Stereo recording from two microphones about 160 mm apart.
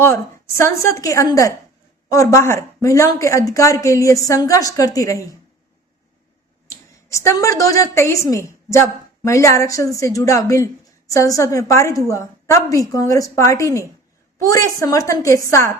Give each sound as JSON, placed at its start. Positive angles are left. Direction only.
{"t": 0.0, "sound": "a woman's voice", "side_deg": 15}
{"t": 6.7, "sound": "a woman's voice", "side_deg": 20}